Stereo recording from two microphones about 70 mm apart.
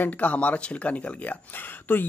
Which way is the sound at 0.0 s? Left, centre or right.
Left.